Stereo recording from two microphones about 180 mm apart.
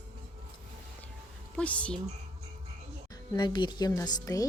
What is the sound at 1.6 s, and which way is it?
Speech, 5° left (ahead or behind).